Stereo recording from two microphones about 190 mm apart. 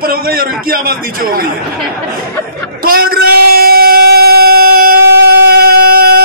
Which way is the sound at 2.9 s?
50° right (ahead or behind).